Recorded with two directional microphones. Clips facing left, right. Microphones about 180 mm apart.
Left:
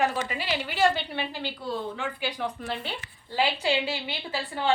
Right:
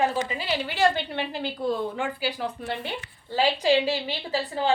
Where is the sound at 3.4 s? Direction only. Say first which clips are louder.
Right 4 dB; 40° right (ahead or behind).